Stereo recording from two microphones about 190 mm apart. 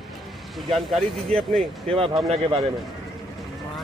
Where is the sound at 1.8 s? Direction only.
30° right (ahead or behind).